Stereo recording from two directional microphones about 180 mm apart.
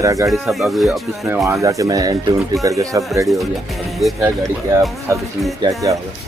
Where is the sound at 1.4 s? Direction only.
15° right (ahead or behind).